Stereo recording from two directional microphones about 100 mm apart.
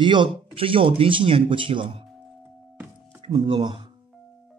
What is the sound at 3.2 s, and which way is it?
Speech, 60° right (ahead or behind).